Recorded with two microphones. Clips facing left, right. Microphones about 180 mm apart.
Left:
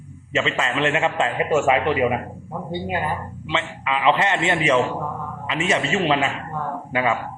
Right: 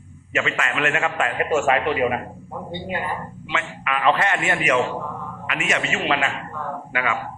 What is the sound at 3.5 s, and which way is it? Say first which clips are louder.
A man's voice: left 2 dB; 25° left (ahead or behind).